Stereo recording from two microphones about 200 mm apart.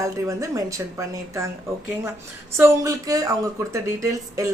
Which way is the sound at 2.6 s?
15° right (ahead or behind).